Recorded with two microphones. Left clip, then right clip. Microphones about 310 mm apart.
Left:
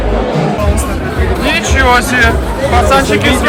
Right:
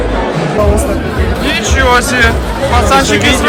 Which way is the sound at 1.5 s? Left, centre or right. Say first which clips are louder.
Left 1 dB; centre.